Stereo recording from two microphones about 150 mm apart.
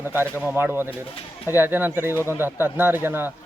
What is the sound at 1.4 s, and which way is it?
Speech, 15° right (ahead or behind).